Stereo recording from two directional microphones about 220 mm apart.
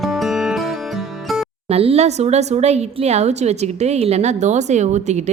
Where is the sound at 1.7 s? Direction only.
25° right (ahead or behind).